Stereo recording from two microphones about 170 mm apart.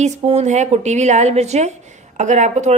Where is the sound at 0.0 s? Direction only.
40° right (ahead or behind).